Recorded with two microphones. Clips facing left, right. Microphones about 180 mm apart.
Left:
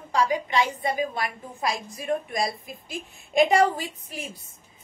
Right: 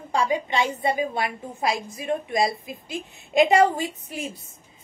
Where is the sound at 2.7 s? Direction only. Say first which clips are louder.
Right 3 dB; 20° right (ahead or behind).